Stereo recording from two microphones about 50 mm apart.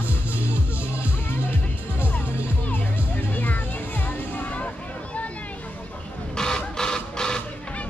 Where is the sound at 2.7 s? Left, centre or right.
Left.